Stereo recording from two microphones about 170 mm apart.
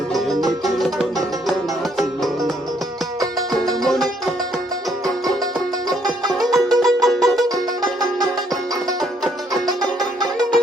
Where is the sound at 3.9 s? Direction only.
Centre (ahead or behind).